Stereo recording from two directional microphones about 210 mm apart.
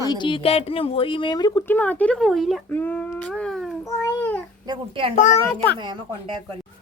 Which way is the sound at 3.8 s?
10° left (ahead or behind).